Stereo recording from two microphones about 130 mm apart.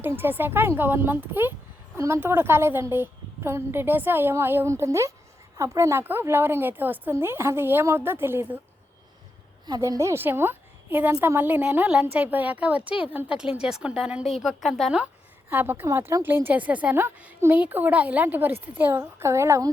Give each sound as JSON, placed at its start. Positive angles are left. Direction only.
{"t": 0.0, "sound": "a woman's voice", "side_deg": -15}
{"t": 9.6, "sound": "a woman's voice", "side_deg": -30}